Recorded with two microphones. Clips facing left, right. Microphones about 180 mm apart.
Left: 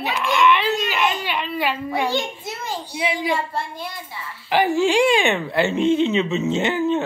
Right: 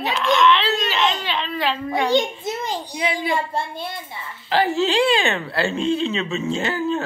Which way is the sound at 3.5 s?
25° right (ahead or behind).